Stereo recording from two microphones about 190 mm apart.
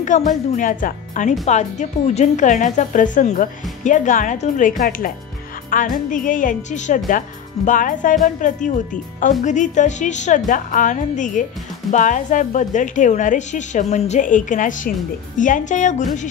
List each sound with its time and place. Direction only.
0.0 s a woman's voice: 40° left (ahead or behind)